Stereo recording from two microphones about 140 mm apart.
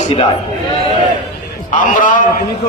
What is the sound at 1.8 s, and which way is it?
Speech, 65° left (ahead or behind).